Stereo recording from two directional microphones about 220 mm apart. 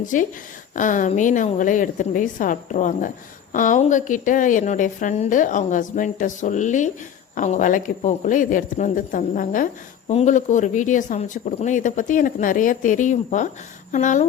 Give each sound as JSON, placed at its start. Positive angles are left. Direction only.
{"t": 0.0, "sound": "speech", "side_deg": 35}